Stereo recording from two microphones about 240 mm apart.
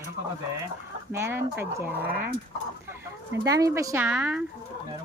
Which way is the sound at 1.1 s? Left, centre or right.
Centre.